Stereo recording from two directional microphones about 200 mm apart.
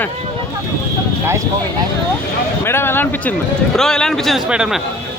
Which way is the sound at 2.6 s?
10° left (ahead or behind).